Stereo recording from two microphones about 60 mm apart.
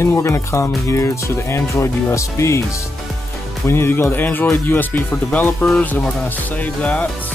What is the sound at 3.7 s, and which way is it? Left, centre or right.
Speech, left.